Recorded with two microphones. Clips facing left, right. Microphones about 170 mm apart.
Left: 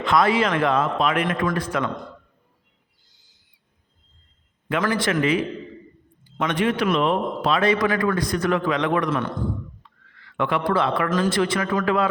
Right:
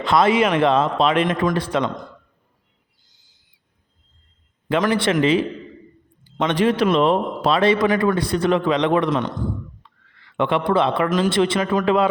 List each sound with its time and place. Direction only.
0.0 s speech: 30° right (ahead or behind)
4.7 s speech: 20° right (ahead or behind)
6.6 s a man's voice: 35° right (ahead or behind)